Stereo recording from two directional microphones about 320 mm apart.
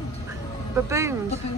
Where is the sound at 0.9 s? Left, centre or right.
Centre.